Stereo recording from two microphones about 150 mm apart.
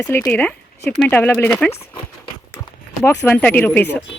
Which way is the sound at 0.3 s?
10° left (ahead or behind).